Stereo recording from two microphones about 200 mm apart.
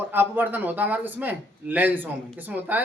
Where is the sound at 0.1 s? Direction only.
10° right (ahead or behind).